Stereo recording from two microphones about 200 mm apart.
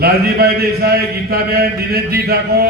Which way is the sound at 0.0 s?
50° right (ahead or behind).